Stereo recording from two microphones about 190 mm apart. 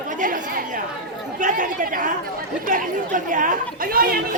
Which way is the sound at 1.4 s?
45° right (ahead or behind).